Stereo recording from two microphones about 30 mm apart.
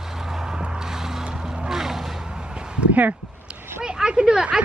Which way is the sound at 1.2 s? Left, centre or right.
Right.